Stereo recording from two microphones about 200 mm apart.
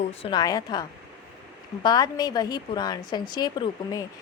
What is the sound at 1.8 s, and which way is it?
Speech, 20° left (ahead or behind).